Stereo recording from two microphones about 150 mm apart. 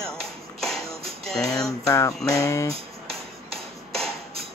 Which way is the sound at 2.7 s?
40° right (ahead or behind).